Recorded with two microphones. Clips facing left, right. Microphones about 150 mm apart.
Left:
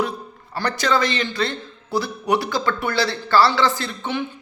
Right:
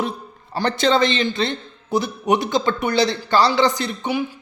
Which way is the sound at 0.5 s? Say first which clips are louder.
Right 3 dB; 25° right (ahead or behind).